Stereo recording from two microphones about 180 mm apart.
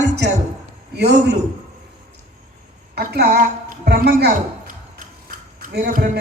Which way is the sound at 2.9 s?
60° right (ahead or behind).